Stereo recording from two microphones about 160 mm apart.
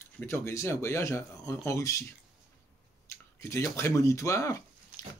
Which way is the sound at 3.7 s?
15° left (ahead or behind).